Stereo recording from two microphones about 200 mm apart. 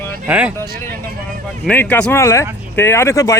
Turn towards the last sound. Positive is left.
turn(degrees=15)  # may be behind; listen again after turning